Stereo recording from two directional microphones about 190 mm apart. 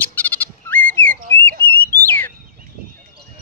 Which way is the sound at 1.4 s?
10° left (ahead or behind).